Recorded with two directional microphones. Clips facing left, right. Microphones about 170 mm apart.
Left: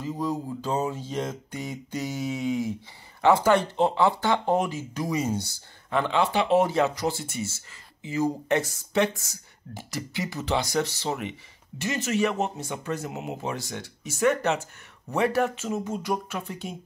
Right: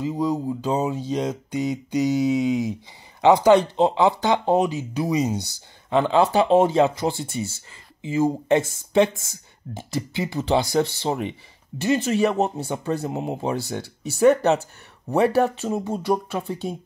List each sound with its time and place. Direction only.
0.0 s speech: 15° right (ahead or behind)
6.0 s speech: 35° right (ahead or behind)